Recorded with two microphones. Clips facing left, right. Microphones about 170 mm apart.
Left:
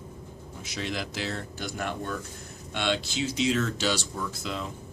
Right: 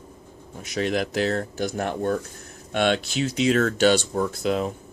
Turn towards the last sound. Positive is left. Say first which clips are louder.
# right 10 dB
turn(degrees=-60)  # may be behind; listen again after turning